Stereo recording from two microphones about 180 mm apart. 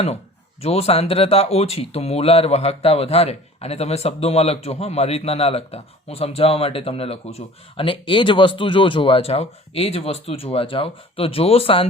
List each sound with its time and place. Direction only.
0.6 s speech: 35° left (ahead or behind)